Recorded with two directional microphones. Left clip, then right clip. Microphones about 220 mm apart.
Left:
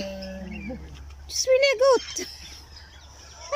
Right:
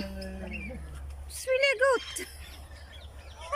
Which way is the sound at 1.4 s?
15° left (ahead or behind).